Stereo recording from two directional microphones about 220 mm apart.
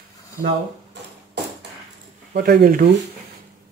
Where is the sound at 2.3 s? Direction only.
45° right (ahead or behind).